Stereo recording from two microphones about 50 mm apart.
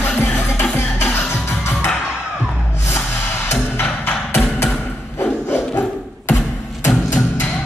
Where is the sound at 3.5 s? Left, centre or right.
Left.